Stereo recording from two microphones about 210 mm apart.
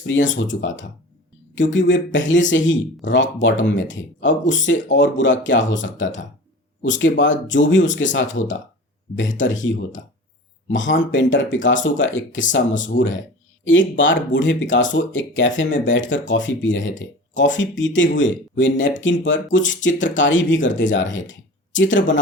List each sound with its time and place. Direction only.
0.0 s speech: 60° left (ahead or behind)